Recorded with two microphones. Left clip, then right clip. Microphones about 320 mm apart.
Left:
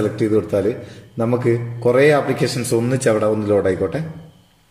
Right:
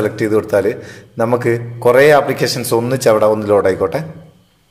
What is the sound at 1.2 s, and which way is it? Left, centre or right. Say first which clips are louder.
Speech: right 4 dB; right.